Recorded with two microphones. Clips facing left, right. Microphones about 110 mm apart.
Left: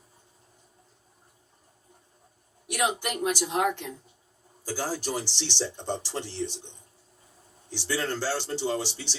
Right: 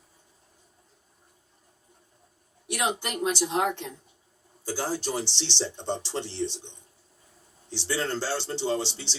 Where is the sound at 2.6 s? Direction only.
20° right (ahead or behind).